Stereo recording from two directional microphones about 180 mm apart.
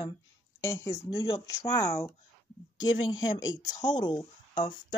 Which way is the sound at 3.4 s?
20° left (ahead or behind).